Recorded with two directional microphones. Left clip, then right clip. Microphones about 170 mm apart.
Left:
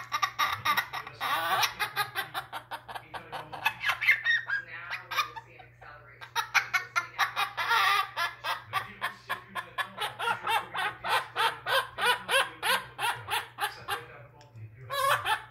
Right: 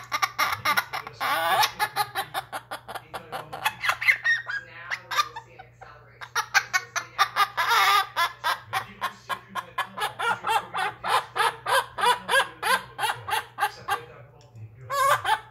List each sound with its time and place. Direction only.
0.1 s laughter: 30° right (ahead or behind)
6.3 s laughter: 20° right (ahead or behind)
14.9 s hiccup: 20° right (ahead or behind)